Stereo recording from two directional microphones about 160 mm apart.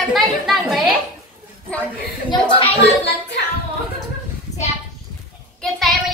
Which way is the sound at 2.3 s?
30° left (ahead or behind).